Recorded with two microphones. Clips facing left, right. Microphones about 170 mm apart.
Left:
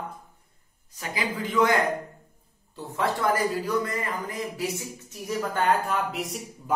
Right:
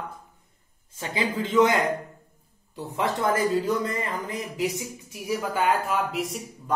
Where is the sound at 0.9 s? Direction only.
25° right (ahead or behind).